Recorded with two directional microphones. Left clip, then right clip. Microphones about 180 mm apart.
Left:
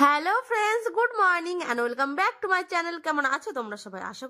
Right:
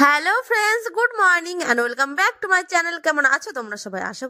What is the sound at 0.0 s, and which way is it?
A woman's voice, 25° right (ahead or behind).